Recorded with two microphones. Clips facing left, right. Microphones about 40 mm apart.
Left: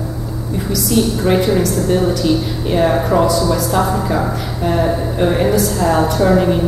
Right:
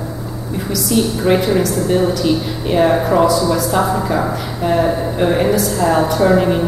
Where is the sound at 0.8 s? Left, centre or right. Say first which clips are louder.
Even; centre.